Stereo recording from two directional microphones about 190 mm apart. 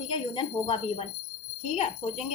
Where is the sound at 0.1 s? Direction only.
25° left (ahead or behind).